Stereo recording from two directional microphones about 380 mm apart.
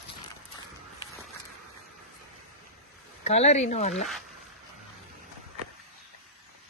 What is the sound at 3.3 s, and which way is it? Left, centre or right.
Speech, centre.